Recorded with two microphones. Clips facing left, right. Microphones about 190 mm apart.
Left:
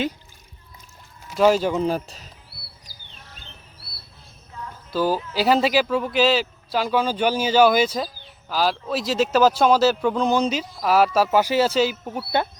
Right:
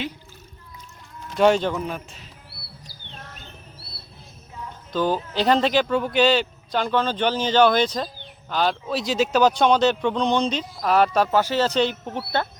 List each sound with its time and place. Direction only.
1.3 s speech: 5° left (ahead or behind)
1.7 s speech: 30° left (ahead or behind)
4.9 s speech: 5° left (ahead or behind)